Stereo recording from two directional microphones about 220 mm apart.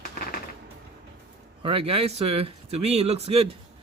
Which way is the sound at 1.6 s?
25° right (ahead or behind).